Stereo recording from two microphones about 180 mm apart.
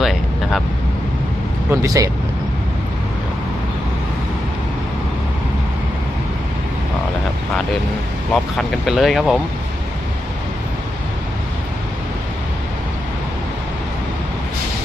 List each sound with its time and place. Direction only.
0.0 s vehicle: centre (ahead or behind)
1.7 s speech: 15° right (ahead or behind)
8.3 s speech: centre (ahead or behind)